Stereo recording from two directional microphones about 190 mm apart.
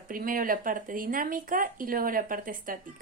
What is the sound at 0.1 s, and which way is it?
A woman's voice, 45° right (ahead or behind).